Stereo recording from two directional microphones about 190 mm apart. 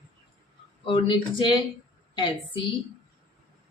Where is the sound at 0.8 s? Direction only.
25° left (ahead or behind).